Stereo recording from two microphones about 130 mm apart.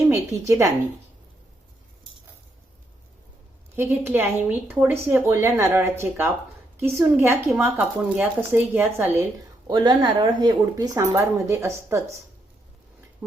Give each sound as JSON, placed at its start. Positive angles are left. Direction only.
{"t": 0.1, "sound": "speech", "side_deg": -25}
{"t": 3.8, "sound": "speech", "side_deg": -15}
{"t": 9.6, "sound": "speech", "side_deg": -35}